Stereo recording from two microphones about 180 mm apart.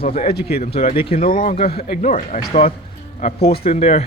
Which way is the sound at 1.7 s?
60° left (ahead or behind).